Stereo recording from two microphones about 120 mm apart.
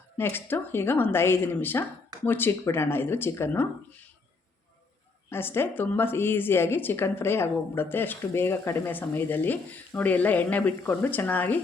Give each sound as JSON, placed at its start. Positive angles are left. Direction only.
{"t": 0.2, "sound": "a woman's voice", "side_deg": 20}
{"t": 5.3, "sound": "a woman's voice", "side_deg": 20}